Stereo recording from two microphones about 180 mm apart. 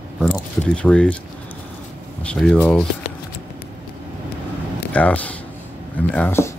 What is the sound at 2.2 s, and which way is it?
Speech, 5° left (ahead or behind).